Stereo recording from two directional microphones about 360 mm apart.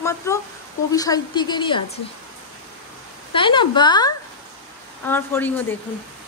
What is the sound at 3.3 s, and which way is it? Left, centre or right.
A woman's voice, centre.